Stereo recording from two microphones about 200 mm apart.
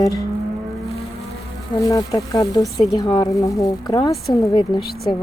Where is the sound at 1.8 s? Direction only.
15° left (ahead or behind).